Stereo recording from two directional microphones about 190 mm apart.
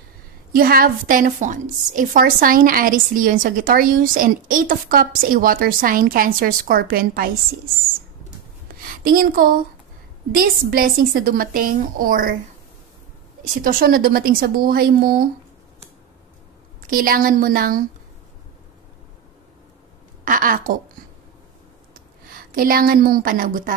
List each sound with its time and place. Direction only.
0.5 s a woman's voice: 50° right (ahead or behind)
9.0 s a woman's voice: 50° right (ahead or behind)
13.4 s a woman's voice: 45° right (ahead or behind)
16.8 s a woman's voice: 50° right (ahead or behind)
20.2 s a woman's voice: 45° right (ahead or behind)
21.9 s a woman's voice: 50° right (ahead or behind)